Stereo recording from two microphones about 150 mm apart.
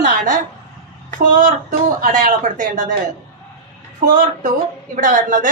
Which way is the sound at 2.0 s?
60° right (ahead or behind).